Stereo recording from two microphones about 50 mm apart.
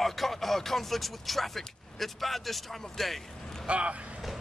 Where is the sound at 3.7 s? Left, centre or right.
Right.